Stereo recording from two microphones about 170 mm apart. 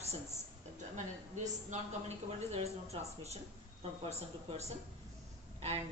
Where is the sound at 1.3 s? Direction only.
45° right (ahead or behind).